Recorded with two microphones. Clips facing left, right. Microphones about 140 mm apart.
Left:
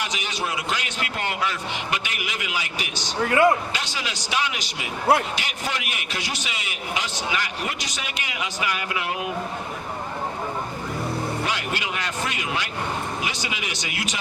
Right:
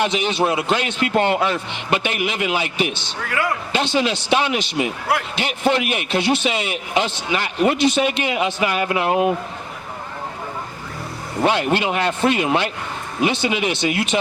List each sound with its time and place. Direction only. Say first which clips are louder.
0.0 s a man's voice: right 10 dB; 25° right (ahead or behind)
3.2 s speech: left 6 dB; 25° left (ahead or behind)
3.7 s a man's voice: right 11 dB; 25° right (ahead or behind)
11.4 s a man's voice: right 10 dB; 25° right (ahead or behind)